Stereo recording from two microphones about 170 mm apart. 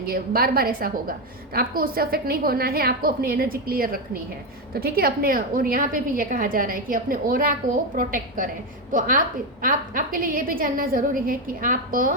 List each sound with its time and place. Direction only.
0.0 s a woman's voice: 60° right (ahead or behind)